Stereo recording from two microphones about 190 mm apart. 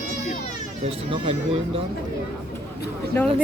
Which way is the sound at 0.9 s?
30° right (ahead or behind).